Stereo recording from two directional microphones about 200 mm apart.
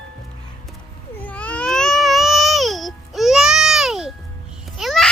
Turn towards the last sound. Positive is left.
turn(degrees=0)  # may be behind; listen again after turning